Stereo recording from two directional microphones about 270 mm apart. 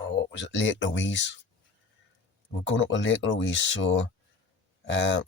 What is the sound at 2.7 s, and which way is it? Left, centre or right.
Speech, left.